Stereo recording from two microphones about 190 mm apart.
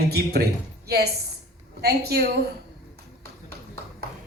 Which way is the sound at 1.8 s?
55° right (ahead or behind).